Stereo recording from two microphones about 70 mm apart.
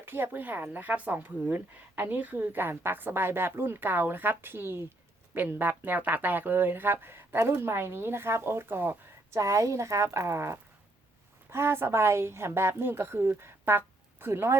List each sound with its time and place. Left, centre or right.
0.0 s speech: right
9.3 s speech: right